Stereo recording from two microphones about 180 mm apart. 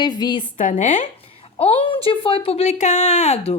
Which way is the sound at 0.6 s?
40° left (ahead or behind).